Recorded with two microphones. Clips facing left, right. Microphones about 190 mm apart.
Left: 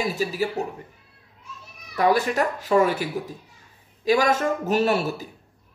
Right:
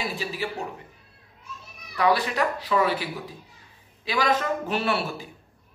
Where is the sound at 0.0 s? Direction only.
40° left (ahead or behind).